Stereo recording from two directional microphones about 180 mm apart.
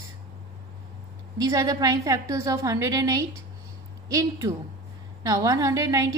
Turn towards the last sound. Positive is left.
turn(degrees=-20)  # may be behind; listen again after turning